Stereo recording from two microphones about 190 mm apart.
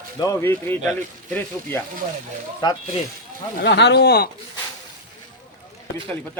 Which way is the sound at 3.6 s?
65° left (ahead or behind).